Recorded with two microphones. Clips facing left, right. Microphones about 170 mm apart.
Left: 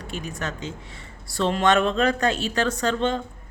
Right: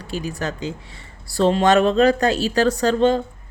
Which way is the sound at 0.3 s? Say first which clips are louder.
Right 5 dB; 35° right (ahead or behind).